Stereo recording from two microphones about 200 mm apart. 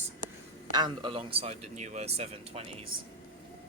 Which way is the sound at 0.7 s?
25° right (ahead or behind).